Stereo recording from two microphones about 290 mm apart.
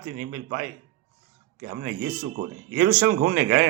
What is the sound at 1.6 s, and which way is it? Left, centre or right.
Speech, right.